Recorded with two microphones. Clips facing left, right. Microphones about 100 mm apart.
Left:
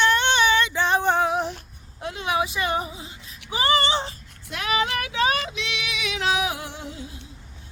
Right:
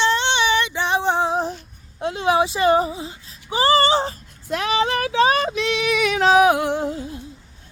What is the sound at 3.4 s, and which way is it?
Child singing, 30° right (ahead or behind).